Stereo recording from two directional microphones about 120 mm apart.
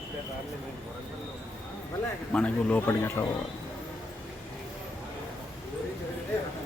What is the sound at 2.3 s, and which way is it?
Speech, 10° left (ahead or behind).